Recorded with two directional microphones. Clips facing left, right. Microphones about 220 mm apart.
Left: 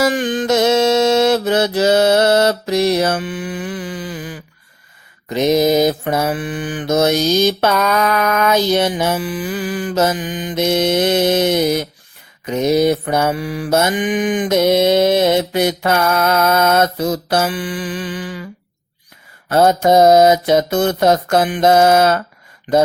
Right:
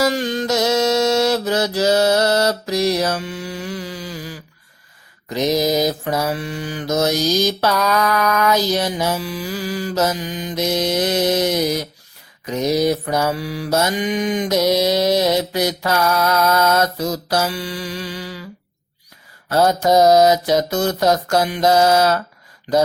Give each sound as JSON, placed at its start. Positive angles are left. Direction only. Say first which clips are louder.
{"t": 0.2, "sound": "music", "louder": "left 3 dB", "side_deg": 15}
{"t": 0.6, "sound": "mantra", "louder": "left 3 dB", "side_deg": 25}
{"t": 19.9, "sound": "mantra", "louder": "left 2 dB", "side_deg": 25}